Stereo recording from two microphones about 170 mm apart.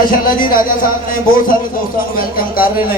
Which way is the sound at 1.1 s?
55° left (ahead or behind).